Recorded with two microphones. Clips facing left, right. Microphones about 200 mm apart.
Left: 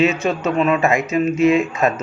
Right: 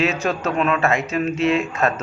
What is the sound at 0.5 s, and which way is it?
A man's voice, 10° left (ahead or behind).